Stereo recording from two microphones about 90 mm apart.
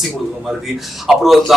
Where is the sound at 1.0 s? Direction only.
Centre (ahead or behind).